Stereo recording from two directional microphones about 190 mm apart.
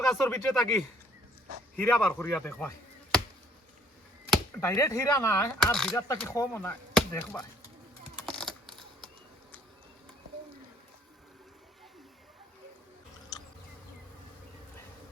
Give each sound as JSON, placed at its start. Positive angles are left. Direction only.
{"t": 0.1, "sound": "speech", "side_deg": 5}
{"t": 4.6, "sound": "speech", "side_deg": 15}
{"t": 5.7, "sound": "speech", "side_deg": 0}
{"t": 6.0, "sound": "speech", "side_deg": 15}
{"t": 8.3, "sound": "typing", "side_deg": 0}
{"t": 13.3, "sound": "bee", "side_deg": 20}